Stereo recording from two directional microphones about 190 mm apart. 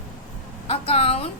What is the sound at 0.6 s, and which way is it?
Speech, 30° left (ahead or behind).